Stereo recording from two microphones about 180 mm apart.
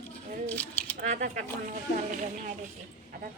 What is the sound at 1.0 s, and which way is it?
Speech, 45° right (ahead or behind).